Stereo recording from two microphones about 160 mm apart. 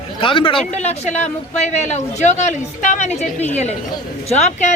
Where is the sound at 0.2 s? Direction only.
35° left (ahead or behind).